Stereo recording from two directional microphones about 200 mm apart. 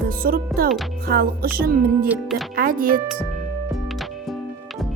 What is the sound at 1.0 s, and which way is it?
Speech, 50° right (ahead or behind).